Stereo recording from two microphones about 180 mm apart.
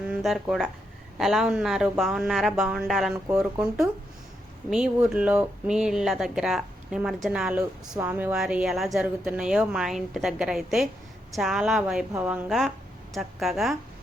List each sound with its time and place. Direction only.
0.1 s speech: centre (ahead or behind)